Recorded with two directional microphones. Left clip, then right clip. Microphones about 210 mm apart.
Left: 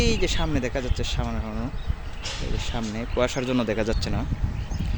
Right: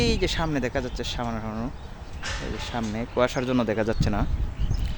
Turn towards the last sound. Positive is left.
turn(degrees=-5)  # may be behind; listen again after turning